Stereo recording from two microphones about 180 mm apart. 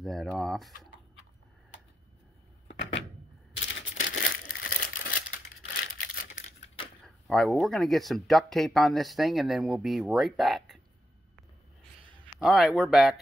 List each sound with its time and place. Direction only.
0.0 s speech: centre (ahead or behind)
2.7 s a sound: 90° left
4.0 s crumpling: 50° left (ahead or behind)
5.7 s a sound: 60° left (ahead or behind)
7.1 s speech: centre (ahead or behind)
12.4 s speech: centre (ahead or behind)